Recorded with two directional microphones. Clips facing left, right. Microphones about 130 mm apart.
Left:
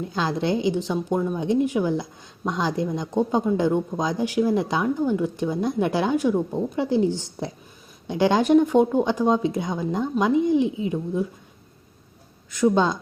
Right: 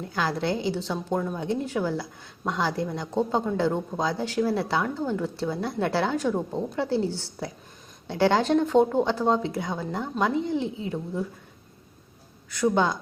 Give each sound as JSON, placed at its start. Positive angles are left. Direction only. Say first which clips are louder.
{"t": 0.0, "sound": "speech", "louder": "left 3 dB", "side_deg": 20}
{"t": 12.5, "sound": "speech", "louder": "left 3 dB", "side_deg": 20}